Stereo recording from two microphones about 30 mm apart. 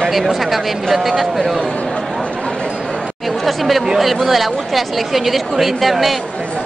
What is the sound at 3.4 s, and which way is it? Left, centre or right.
Chatter, centre.